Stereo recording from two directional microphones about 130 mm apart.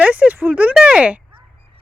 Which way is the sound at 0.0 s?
10° right (ahead or behind).